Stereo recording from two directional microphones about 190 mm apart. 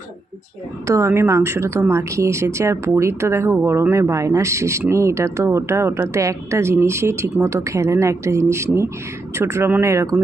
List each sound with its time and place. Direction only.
0.9 s speech: 15° right (ahead or behind)